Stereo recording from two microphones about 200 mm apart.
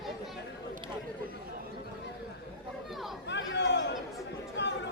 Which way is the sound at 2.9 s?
Centre (ahead or behind).